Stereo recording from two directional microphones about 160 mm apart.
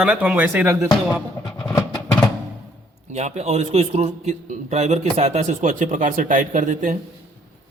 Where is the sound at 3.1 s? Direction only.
45° right (ahead or behind).